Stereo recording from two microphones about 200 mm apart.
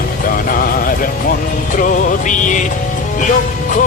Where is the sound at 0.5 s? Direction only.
45° left (ahead or behind).